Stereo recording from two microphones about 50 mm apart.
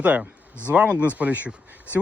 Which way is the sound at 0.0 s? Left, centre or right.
Right.